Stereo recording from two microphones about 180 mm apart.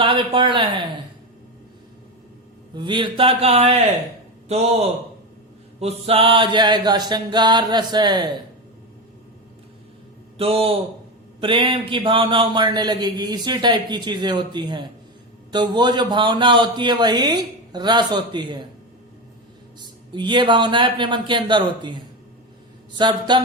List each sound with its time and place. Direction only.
0.0 s speech: 30° right (ahead or behind)
2.7 s a man's voice: 25° right (ahead or behind)
10.3 s a man's voice: 30° right (ahead or behind)
20.1 s a man's voice: 25° right (ahead or behind)